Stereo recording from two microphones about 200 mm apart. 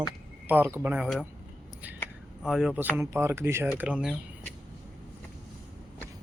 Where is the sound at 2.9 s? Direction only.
15° right (ahead or behind).